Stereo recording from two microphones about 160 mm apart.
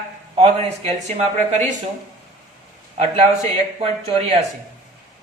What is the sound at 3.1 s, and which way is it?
Speech, 40° right (ahead or behind).